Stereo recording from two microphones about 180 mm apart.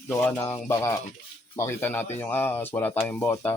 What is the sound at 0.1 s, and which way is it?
Speech, 10° left (ahead or behind).